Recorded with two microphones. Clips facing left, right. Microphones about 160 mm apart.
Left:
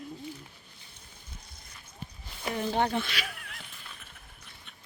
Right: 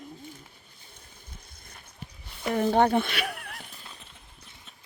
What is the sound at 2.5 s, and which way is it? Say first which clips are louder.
Speech: right 6 dB; 55° right (ahead or behind).